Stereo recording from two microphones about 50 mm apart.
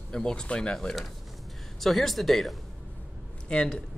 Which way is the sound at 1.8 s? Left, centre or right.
Centre.